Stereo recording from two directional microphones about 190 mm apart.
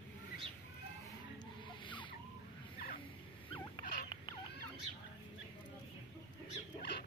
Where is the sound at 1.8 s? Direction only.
25° left (ahead or behind).